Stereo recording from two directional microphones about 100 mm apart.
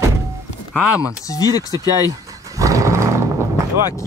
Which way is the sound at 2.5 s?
35° right (ahead or behind).